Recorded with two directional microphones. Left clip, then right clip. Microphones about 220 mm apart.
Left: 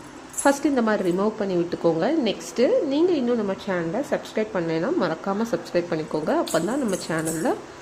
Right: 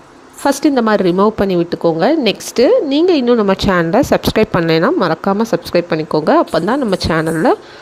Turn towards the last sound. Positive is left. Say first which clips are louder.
# right 12 dB
turn(degrees=-30)  # may be behind; listen again after turning